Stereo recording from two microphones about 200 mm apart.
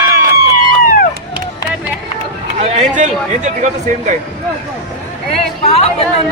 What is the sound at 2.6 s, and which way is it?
Speech, 35° right (ahead or behind).